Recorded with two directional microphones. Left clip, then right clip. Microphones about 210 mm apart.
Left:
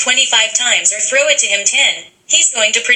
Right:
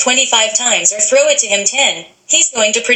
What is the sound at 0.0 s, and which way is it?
A woman's voice, 30° right (ahead or behind).